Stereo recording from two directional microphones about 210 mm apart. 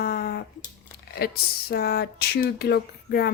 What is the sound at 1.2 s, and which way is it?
Speech, 50° left (ahead or behind).